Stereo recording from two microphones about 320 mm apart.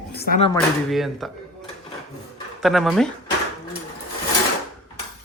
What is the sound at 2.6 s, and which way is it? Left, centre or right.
Speech, centre.